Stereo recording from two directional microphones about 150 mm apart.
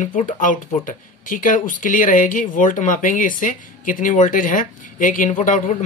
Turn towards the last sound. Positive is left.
turn(degrees=55)  # may be behind; listen again after turning